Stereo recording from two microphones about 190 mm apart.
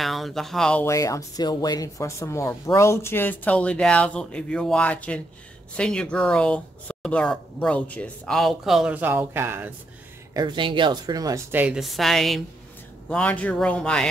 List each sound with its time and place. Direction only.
0.0 s speech: centre (ahead or behind)
0.8 s speech: 15° left (ahead or behind); by 9.7 s 10° right (ahead or behind)
10.3 s speech: 25° right (ahead or behind); by 14.0 s 5° left (ahead or behind)